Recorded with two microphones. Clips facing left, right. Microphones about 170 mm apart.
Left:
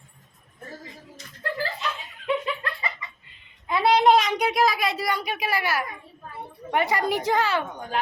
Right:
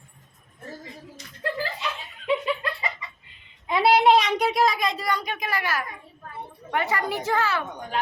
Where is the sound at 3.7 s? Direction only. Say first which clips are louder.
Even; 10° right (ahead or behind); by 5.8 s 10° left (ahead or behind).